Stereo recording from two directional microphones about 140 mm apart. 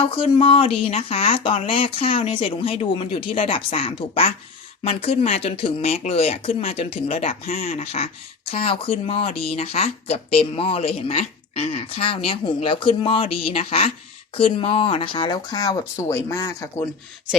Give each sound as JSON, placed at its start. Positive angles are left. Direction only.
{"t": 0.0, "sound": "speech", "side_deg": 40}